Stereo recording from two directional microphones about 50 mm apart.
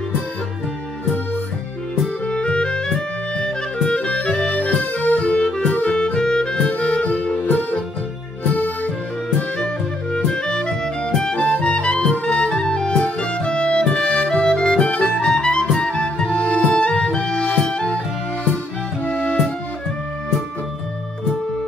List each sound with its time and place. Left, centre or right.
2.2 s music: centre
6.1 s music: centre
7.3 s music: left
10.1 s music: centre
19.0 s music: left